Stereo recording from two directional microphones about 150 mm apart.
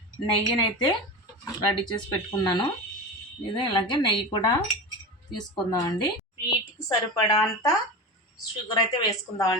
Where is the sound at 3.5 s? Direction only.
30° left (ahead or behind).